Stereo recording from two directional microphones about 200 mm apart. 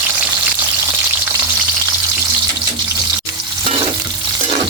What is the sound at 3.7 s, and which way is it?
Frying, 30° right (ahead or behind).